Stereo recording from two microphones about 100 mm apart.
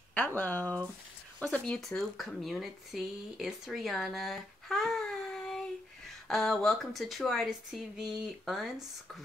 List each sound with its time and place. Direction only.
0.1 s a woman's voice: 15° left (ahead or behind); by 8.8 s centre (ahead or behind)